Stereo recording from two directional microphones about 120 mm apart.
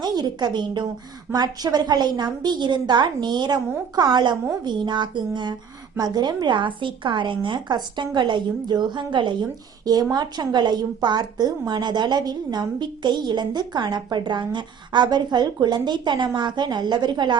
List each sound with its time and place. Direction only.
0.0 s a woman's voice: 35° right (ahead or behind)